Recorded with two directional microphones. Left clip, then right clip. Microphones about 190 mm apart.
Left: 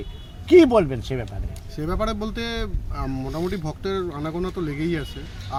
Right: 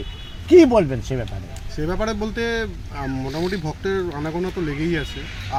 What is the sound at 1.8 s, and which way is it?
Speech, 20° left (ahead or behind).